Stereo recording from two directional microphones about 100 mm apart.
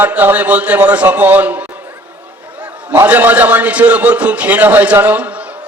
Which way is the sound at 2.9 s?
20° right (ahead or behind).